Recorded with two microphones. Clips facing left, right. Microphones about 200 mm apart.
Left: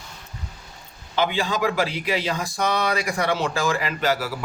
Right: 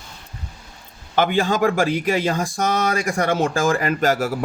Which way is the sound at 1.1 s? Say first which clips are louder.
Right 5 dB; 50° right (ahead or behind).